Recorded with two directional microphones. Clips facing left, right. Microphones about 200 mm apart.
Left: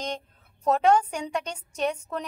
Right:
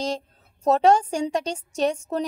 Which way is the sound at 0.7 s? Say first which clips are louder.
Right 3 dB; 30° right (ahead or behind).